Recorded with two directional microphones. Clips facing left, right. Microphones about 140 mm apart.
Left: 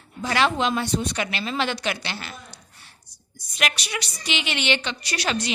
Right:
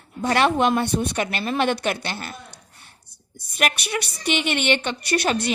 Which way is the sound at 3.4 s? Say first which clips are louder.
Right 3 dB; 55° right (ahead or behind).